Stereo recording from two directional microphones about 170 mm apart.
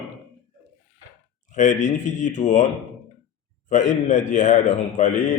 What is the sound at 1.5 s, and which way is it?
A man's voice, 45° left (ahead or behind).